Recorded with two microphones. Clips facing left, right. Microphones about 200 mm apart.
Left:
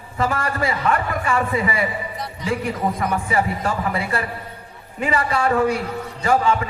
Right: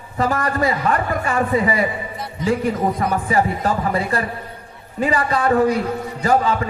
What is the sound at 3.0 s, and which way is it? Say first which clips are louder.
A man's voice: right 2 dB; 40° right (ahead or behind).